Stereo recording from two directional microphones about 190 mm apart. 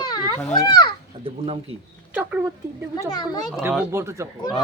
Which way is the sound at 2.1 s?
10° right (ahead or behind).